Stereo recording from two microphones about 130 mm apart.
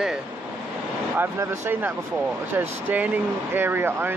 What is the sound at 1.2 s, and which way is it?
Speech, 15° right (ahead or behind).